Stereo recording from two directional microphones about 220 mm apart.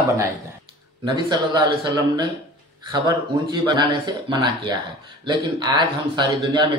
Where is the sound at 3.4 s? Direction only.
20° right (ahead or behind).